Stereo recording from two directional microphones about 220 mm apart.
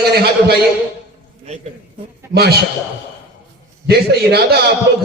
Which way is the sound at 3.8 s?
45° right (ahead or behind).